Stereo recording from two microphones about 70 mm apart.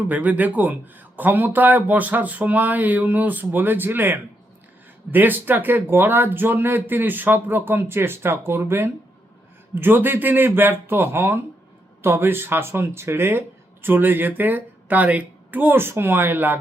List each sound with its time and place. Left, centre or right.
0.1 s speech: right